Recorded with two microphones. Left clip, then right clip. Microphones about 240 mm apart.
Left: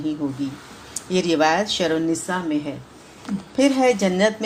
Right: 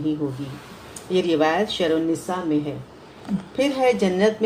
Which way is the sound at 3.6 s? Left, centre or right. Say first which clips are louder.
Left 2 dB; left.